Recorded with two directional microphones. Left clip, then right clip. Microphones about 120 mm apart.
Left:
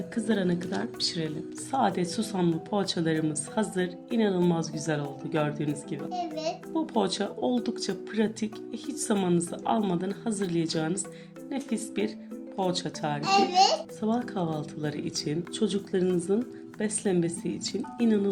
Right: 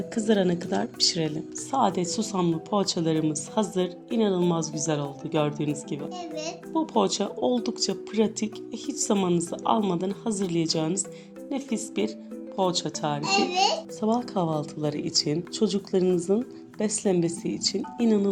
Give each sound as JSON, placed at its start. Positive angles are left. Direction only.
{"t": 0.1, "sound": "speech", "side_deg": -55}
{"t": 1.7, "sound": "speech", "side_deg": -25}
{"t": 6.0, "sound": "a child's voice", "side_deg": -5}
{"t": 6.7, "sound": "speech", "side_deg": -25}
{"t": 13.1, "sound": "a child's voice", "side_deg": 20}
{"t": 14.0, "sound": "speech", "side_deg": -40}